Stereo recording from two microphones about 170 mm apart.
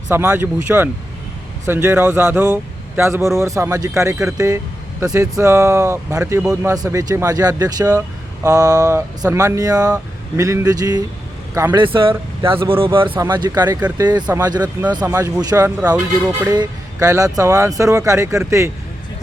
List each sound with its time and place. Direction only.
0.1 s speech: 10° right (ahead or behind)
15.8 s speech: 5° right (ahead or behind)
16.5 s speech: 20° right (ahead or behind)